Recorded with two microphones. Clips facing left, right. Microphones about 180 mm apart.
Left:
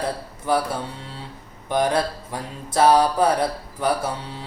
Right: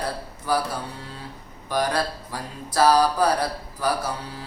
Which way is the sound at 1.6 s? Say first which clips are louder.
Left 3 dB; 25° left (ahead or behind).